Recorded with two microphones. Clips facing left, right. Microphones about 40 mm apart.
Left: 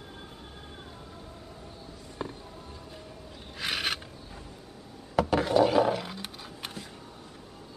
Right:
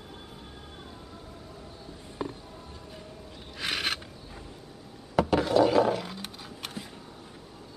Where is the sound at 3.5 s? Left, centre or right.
Centre.